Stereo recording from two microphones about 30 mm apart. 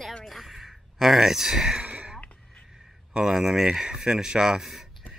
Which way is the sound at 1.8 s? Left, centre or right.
Right.